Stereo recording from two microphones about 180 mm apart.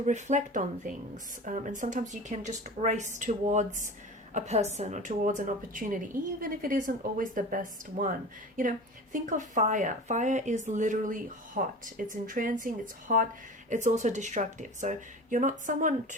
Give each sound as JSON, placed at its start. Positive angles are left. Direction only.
{"t": 0.0, "sound": "a woman's voice", "side_deg": -40}
{"t": 9.1, "sound": "speech", "side_deg": -45}